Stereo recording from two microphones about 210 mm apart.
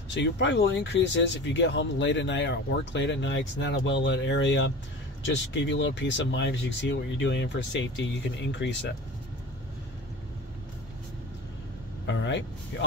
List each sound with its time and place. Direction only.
0.1 s speech: 60° left (ahead or behind)
12.1 s speech: 60° left (ahead or behind)